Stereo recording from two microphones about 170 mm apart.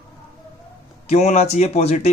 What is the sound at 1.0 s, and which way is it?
Speech, 45° left (ahead or behind).